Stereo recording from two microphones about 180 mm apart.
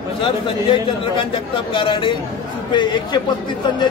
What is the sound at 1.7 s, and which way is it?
Speech, 25° left (ahead or behind).